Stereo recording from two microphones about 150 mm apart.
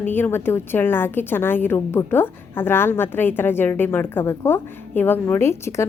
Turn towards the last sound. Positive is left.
turn(degrees=15)  # may be behind; listen again after turning